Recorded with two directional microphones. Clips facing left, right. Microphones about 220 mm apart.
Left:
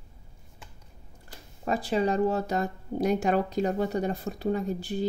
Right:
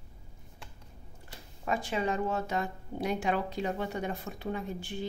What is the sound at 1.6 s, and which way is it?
Speech, 35° left (ahead or behind).